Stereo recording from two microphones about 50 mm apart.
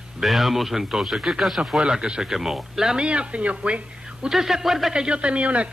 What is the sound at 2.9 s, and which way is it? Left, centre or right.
Speech, right.